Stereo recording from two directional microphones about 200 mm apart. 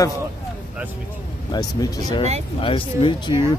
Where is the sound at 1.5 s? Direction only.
20° left (ahead or behind).